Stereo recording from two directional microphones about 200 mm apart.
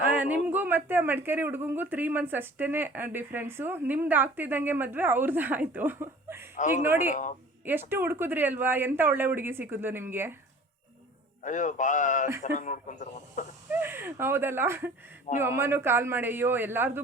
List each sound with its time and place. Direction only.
0.1 s speech: 10° right (ahead or behind)
6.6 s speech: 40° left (ahead or behind)
6.8 s speech: 10° right (ahead or behind)
7.1 s speech: 40° left (ahead or behind)
7.6 s speech: 10° right (ahead or behind)
11.4 s speech: 40° left (ahead or behind)
13.7 s speech: 10° right (ahead or behind)